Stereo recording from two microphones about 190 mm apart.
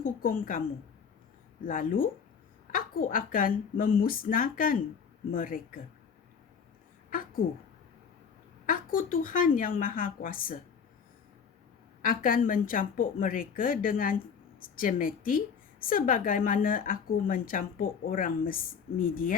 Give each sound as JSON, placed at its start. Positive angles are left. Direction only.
{"t": 0.0, "sound": "a woman's voice", "side_deg": 50}
{"t": 1.6, "sound": "a woman's voice", "side_deg": 45}
{"t": 8.6, "sound": "a woman's voice", "side_deg": 45}
{"t": 12.0, "sound": "a woman's voice", "side_deg": 45}